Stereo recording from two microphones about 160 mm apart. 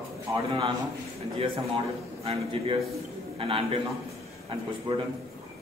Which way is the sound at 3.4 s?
35° right (ahead or behind).